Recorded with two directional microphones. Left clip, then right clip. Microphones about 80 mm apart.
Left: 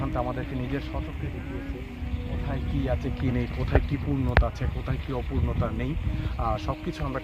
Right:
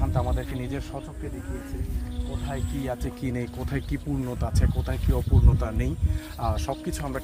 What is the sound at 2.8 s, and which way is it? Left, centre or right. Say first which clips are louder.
Speech: left 3 dB; centre.